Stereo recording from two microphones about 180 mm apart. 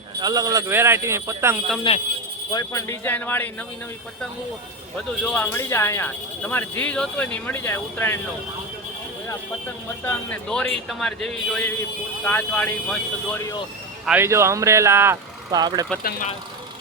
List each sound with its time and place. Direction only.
0.2 s speech: 20° right (ahead or behind)
1.9 s speech: 25° left (ahead or behind); by 3.5 s 10° left (ahead or behind)
5.2 s speech: 10° left (ahead or behind)
10.0 s a man's voice: 10° left (ahead or behind)
14.0 s speech: 10° right (ahead or behind)